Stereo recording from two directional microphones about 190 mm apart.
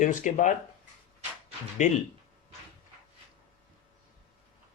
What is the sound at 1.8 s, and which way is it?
Speech, 40° left (ahead or behind).